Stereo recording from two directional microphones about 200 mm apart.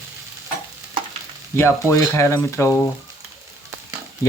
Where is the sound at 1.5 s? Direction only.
15° left (ahead or behind).